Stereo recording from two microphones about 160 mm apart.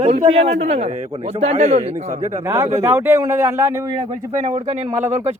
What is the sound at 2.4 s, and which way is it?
A man's voice, 20° right (ahead or behind).